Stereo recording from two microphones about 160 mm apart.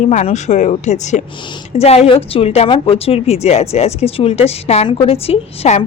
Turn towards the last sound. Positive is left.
turn(degrees=40)  # may be behind; listen again after turning